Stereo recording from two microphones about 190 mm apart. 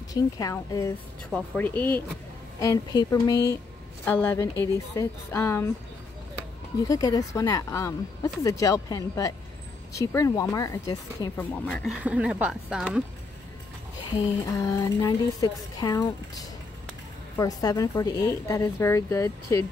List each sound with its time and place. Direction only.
0.1 s a woman's voice: 20° left (ahead or behind)
1.3 s speech: 5° left (ahead or behind)
2.6 s a woman's voice: 20° left (ahead or behind)
6.8 s speech: 20° left (ahead or behind)
11.6 s speech: 5° left (ahead or behind)
11.9 s speech: 5° right (ahead or behind)
14.6 s a woman's voice: 15° left (ahead or behind)